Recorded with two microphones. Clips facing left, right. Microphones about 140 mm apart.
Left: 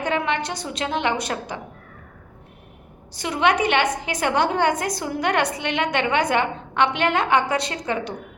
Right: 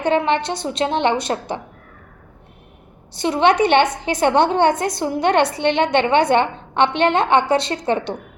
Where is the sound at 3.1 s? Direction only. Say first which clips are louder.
Right 5 dB; 30° right (ahead or behind).